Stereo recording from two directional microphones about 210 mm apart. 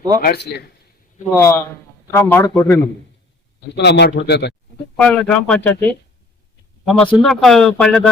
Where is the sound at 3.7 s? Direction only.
55° left (ahead or behind).